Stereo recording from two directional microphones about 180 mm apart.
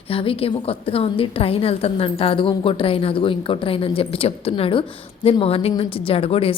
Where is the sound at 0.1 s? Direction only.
30° left (ahead or behind).